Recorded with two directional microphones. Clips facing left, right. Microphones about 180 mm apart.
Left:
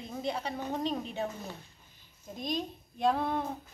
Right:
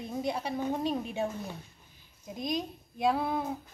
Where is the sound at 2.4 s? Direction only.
10° right (ahead or behind).